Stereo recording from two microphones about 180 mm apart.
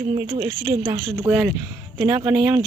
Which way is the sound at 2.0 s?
20° right (ahead or behind).